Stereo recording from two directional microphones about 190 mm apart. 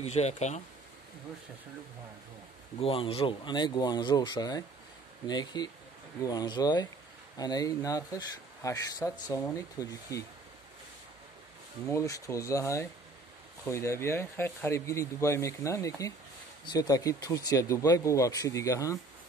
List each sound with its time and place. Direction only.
0.0 s speech: 35° left (ahead or behind)
2.8 s speech: 30° left (ahead or behind)
11.9 s speech: 15° left (ahead or behind)